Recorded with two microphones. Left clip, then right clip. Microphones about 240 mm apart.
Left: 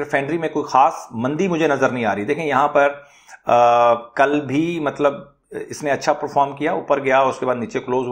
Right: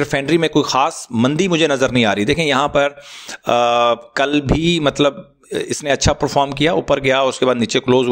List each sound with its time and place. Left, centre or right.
0.0 s a man's voice: right
5.9 s speech: right
6.3 s a man's voice: right
7.6 s speech: right